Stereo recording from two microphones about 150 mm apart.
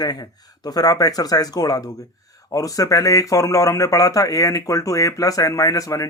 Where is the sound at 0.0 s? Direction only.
25° left (ahead or behind).